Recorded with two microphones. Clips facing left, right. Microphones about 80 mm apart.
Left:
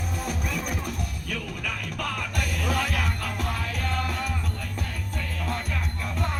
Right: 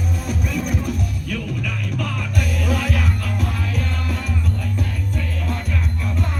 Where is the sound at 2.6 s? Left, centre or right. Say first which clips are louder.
Right 2 dB; centre.